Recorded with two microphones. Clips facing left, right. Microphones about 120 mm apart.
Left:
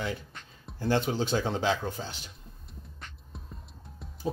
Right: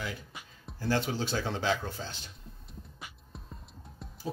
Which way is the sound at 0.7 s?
20° left (ahead or behind).